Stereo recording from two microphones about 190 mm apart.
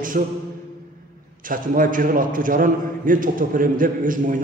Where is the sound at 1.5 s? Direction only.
45° right (ahead or behind).